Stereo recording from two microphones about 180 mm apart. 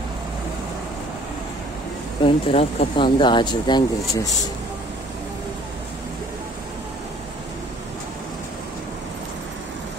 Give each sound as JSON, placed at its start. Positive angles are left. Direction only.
{"t": 2.2, "sound": "speech", "side_deg": 30}